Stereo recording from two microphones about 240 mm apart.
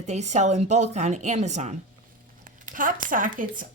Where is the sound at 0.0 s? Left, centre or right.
Right.